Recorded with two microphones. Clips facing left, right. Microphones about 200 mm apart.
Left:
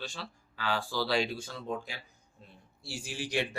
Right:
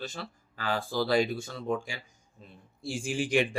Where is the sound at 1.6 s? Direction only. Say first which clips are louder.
Right 6 dB; 75° right (ahead or behind).